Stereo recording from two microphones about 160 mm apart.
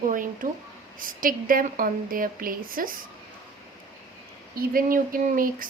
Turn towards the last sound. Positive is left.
turn(degrees=-60)  # may be behind; listen again after turning